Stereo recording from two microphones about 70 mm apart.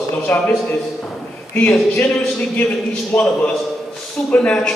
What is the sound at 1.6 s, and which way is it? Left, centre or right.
Speech, left.